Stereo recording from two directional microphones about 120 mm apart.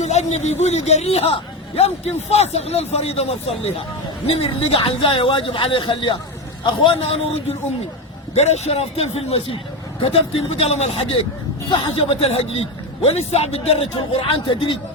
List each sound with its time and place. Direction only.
0.0 s a man's voice: 70° left (ahead or behind); by 6.1 s 45° left (ahead or behind)
6.8 s a man's voice: 55° left (ahead or behind)
8.4 s a man's voice: 70° left (ahead or behind); by 14.8 s 45° left (ahead or behind)